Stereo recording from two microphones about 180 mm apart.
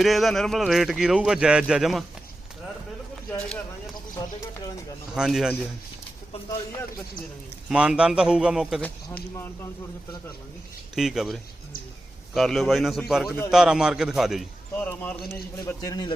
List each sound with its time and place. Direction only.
0.0 s speech: centre (ahead or behind)
4.2 s speech: 20° left (ahead or behind)
5.1 s speech: 5° right (ahead or behind)
7.7 s speech: 5° right (ahead or behind)
8.8 s speech: 10° left (ahead or behind)
10.9 s speech: centre (ahead or behind)
14.8 s speech: 10° left (ahead or behind)
15.6 s speech: 20° left (ahead or behind)